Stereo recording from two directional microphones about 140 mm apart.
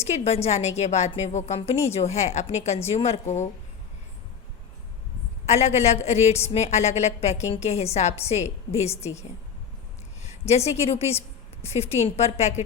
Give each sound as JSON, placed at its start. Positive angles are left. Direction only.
{"t": 0.0, "sound": "a woman's voice", "side_deg": 50}
{"t": 5.5, "sound": "a woman's voice", "side_deg": 55}
{"t": 10.2, "sound": "a woman's voice", "side_deg": 50}